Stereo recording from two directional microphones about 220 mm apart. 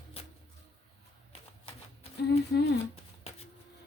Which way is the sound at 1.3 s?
25° left (ahead or behind).